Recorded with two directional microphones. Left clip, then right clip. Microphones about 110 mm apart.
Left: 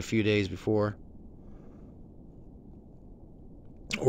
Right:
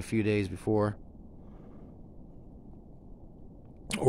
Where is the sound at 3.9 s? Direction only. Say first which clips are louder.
Even; 40° right (ahead or behind).